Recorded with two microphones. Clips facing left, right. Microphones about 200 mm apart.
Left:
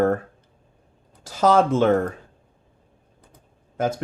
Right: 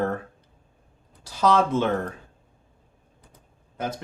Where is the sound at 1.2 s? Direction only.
45° left (ahead or behind).